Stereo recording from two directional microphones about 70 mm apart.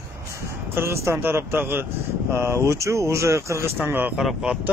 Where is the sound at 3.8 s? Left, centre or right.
Right.